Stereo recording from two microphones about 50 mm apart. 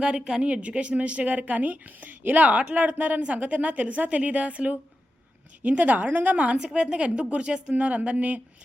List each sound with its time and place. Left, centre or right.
0.2 s a woman's voice: centre
0.4 s a woman's voice: right